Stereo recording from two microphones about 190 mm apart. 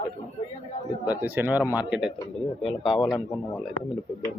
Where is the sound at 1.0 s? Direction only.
10° right (ahead or behind).